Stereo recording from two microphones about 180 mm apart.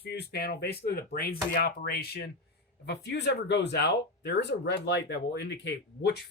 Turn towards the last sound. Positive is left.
turn(degrees=70)  # may be behind; listen again after turning